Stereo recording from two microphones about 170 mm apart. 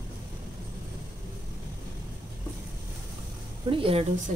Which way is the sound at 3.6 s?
30° right (ahead or behind).